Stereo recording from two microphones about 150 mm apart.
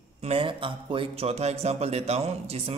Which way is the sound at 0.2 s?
40° right (ahead or behind).